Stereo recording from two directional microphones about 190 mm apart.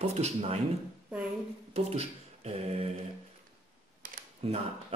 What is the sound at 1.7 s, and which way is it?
Mantra, 30° right (ahead or behind).